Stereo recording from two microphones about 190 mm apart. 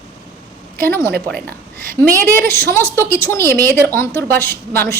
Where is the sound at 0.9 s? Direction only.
15° left (ahead or behind).